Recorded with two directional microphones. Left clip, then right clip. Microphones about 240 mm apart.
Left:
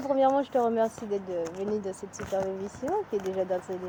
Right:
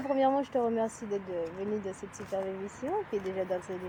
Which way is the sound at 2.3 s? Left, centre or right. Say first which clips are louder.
Left 5 dB; centre.